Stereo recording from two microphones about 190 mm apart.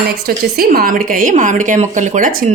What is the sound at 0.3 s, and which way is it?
Speech, 55° right (ahead or behind).